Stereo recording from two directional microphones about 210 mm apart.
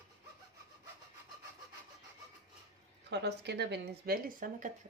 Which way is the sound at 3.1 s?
55° right (ahead or behind).